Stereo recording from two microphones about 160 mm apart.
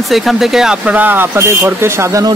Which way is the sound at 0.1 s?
Centre (ahead or behind).